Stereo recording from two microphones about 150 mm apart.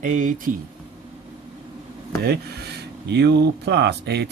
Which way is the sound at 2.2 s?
90° right.